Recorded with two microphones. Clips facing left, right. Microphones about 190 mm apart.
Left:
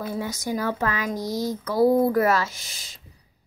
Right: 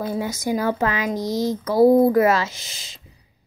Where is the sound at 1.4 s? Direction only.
20° right (ahead or behind).